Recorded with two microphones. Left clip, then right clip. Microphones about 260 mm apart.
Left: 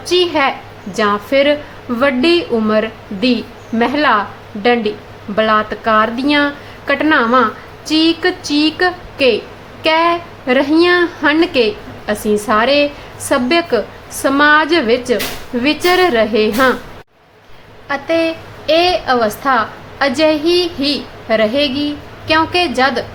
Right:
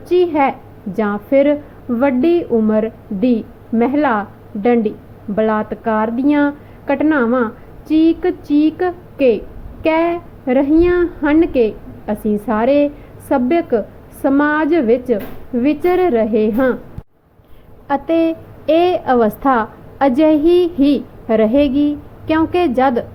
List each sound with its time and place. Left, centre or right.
0.0 s a woman's voice: centre
17.8 s a woman's voice: right